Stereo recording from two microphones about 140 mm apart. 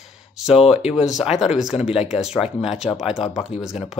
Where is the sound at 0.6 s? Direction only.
45° left (ahead or behind).